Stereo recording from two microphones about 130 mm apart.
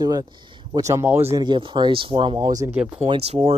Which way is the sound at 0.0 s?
30° right (ahead or behind).